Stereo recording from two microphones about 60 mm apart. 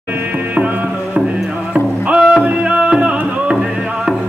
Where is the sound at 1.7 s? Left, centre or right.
Centre.